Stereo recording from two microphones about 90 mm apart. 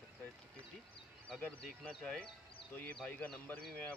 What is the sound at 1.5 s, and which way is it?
Speech, 15° left (ahead or behind).